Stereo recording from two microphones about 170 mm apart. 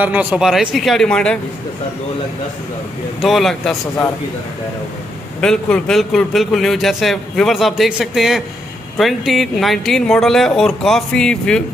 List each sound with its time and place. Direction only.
0.0 s a man's voice: 10° right (ahead or behind)
3.2 s a man's voice: centre (ahead or behind)
5.4 s a man's voice: 5° left (ahead or behind)